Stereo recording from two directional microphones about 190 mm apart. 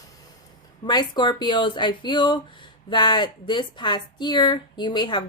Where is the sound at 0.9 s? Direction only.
25° left (ahead or behind).